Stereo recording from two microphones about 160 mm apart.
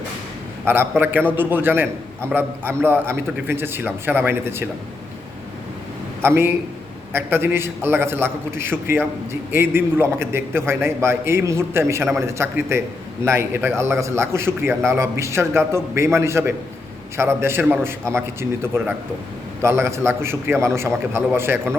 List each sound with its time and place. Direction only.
0.6 s a man's voice: 15° right (ahead or behind)
6.2 s a man's voice: 15° right (ahead or behind)